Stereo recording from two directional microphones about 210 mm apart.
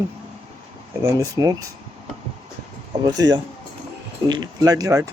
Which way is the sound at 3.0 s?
20° right (ahead or behind).